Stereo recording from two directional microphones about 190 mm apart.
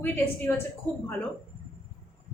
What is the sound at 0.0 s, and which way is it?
Speech, 10° left (ahead or behind).